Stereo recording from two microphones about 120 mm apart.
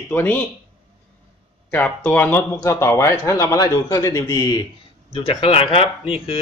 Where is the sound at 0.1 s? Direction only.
15° left (ahead or behind).